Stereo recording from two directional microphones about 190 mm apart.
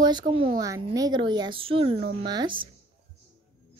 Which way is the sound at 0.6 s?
20° right (ahead or behind).